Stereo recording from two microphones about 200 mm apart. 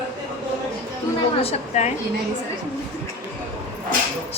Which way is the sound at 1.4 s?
30° left (ahead or behind).